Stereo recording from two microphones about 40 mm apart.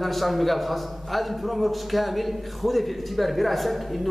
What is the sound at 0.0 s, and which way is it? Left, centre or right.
A man's voice, centre.